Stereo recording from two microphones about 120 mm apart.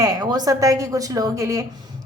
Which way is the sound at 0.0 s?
30° right (ahead or behind).